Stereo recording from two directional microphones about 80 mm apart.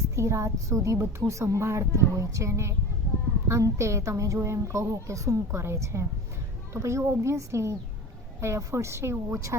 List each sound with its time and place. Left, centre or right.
0.2 s a woman's voice: right